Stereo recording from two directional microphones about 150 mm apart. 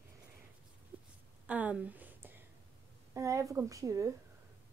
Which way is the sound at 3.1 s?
20° right (ahead or behind).